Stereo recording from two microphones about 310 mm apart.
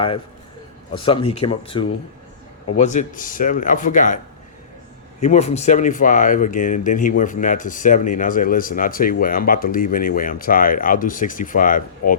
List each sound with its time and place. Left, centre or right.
0.9 s speech: centre
5.2 s speech: left